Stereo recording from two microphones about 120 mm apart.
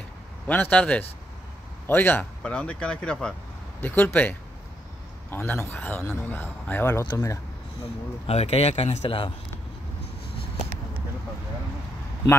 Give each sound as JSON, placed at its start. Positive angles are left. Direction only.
{"t": 0.5, "sound": "speech", "side_deg": 10}
{"t": 8.3, "sound": "speech", "side_deg": 60}